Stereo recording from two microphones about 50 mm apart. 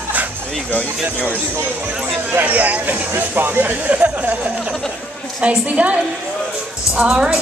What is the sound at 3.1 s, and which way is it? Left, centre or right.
Speech, right.